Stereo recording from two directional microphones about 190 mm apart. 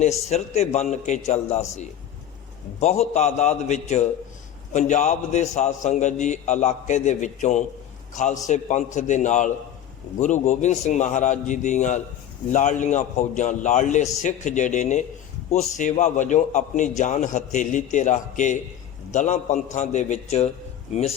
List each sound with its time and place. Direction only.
0.3 s a man's voice: 35° left (ahead or behind)
2.8 s a man's voice: 35° left (ahead or behind)